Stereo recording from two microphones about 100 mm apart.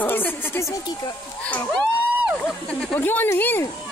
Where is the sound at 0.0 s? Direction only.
20° left (ahead or behind).